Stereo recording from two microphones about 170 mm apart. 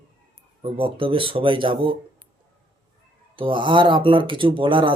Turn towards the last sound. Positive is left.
turn(degrees=-30)  # may be behind; listen again after turning